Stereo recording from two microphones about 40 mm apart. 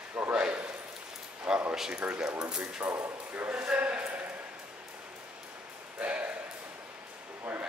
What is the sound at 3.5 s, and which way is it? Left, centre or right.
Speech, right.